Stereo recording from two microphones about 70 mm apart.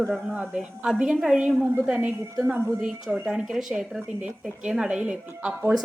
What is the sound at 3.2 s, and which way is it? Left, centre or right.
A woman's voice, centre.